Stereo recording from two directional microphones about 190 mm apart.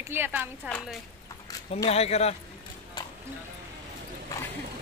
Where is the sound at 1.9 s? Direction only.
35° left (ahead or behind).